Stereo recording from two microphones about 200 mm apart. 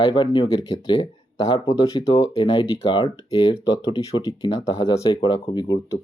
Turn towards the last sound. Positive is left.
turn(degrees=20)  # may be behind; listen again after turning